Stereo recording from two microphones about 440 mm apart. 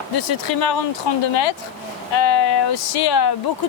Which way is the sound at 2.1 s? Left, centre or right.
Left.